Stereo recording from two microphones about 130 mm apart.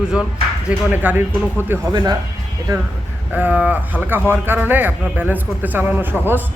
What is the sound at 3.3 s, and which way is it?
Speech, 10° right (ahead or behind).